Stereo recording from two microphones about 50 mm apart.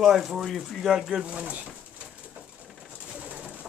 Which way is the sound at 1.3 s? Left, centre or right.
Right.